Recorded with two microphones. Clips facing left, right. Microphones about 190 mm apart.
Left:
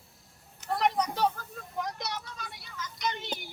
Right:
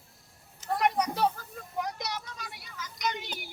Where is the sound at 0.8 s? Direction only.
10° right (ahead or behind).